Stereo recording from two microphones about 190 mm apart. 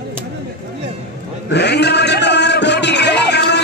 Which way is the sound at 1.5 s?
60° left (ahead or behind).